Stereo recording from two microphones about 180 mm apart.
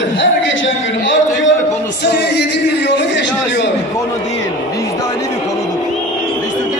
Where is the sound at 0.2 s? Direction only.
90° left.